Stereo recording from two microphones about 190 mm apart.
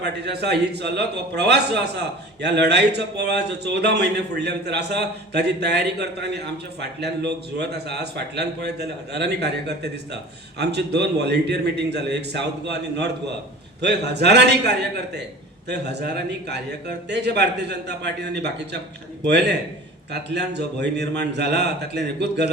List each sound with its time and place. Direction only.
0.0 s a man's voice: 60° right (ahead or behind)